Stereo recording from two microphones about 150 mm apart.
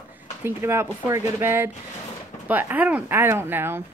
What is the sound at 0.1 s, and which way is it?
Speech, 15° right (ahead or behind).